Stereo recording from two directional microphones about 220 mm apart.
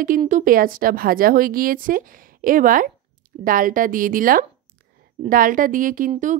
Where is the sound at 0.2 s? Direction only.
35° right (ahead or behind).